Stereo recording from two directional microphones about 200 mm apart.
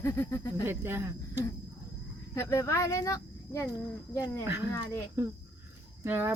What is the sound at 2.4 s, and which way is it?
Speech, 15° left (ahead or behind).